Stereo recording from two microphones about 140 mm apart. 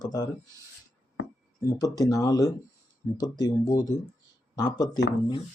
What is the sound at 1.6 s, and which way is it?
Speech, 25° left (ahead or behind).